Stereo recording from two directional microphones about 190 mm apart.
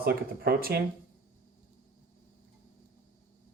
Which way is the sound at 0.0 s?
55° right (ahead or behind).